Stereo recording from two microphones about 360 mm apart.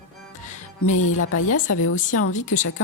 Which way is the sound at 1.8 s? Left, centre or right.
Left.